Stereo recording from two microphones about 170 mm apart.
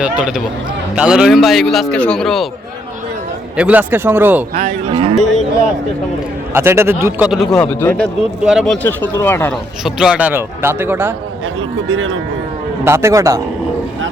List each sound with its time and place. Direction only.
0.0 s speech: 5° right (ahead or behind)
3.6 s a man's voice: 10° right (ahead or behind)
4.5 s cattle: 40° right (ahead or behind)
5.1 s a sound: centre (ahead or behind)
6.5 s a man's voice: 15° right (ahead or behind)
7.3 s a man's voice: centre (ahead or behind)
8.4 s speech: centre (ahead or behind)
8.9 s a man's voice: 10° left (ahead or behind)
9.8 s a man's voice: 5° right (ahead or behind)
12.8 s a man's voice: 15° right (ahead or behind)